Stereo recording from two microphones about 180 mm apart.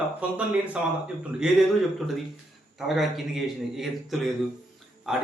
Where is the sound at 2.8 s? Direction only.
Centre (ahead or behind).